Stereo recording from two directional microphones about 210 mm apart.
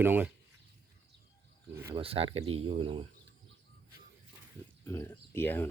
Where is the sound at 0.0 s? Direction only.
10° right (ahead or behind).